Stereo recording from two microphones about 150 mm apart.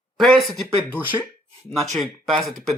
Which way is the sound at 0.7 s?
15° right (ahead or behind).